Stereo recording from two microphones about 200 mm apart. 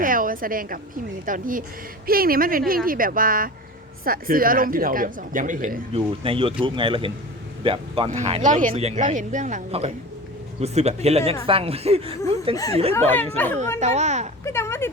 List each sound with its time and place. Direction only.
0.0 s a sound: 45° right (ahead or behind)
1.2 s speech: 45° right (ahead or behind)
5.9 s speech: 25° right (ahead or behind)
12.9 s speech: 10° left (ahead or behind)
13.7 s speech: 35° right (ahead or behind)
14.4 s speech: 15° left (ahead or behind)